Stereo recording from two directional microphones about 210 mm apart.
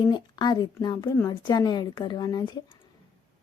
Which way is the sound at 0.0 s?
20° left (ahead or behind).